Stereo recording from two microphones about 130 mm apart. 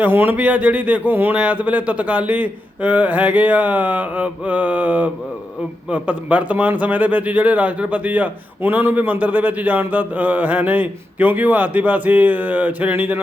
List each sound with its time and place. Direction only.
0.0 s speech: 15° right (ahead or behind)